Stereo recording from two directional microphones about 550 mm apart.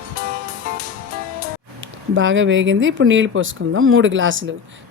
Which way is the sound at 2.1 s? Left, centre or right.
Centre.